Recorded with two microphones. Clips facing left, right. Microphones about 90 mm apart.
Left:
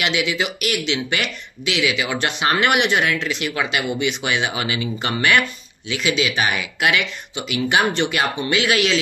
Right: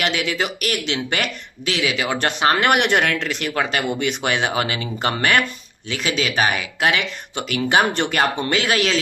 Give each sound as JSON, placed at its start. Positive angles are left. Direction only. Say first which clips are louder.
{"t": 0.0, "sound": "speech", "louder": "even", "side_deg": -40}